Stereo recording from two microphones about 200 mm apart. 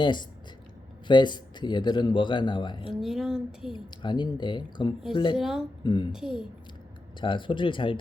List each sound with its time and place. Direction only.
0.0 s speech: 20° left (ahead or behind)
3.0 s speech: centre (ahead or behind)
3.7 s speech: 25° left (ahead or behind)
5.4 s speech: centre (ahead or behind)
5.8 s speech: 20° left (ahead or behind)
6.1 s speech: 5° right (ahead or behind)
7.2 s speech: 25° left (ahead or behind)